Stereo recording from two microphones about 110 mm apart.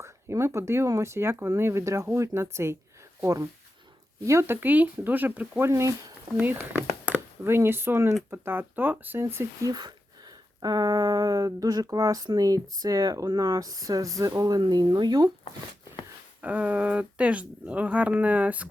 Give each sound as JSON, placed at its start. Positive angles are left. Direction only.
{"t": 0.0, "sound": "speech", "side_deg": -25}
{"t": 4.3, "sound": "speech", "side_deg": -25}
{"t": 9.7, "sound": "a sound", "side_deg": -40}
{"t": 16.4, "sound": "speech", "side_deg": -15}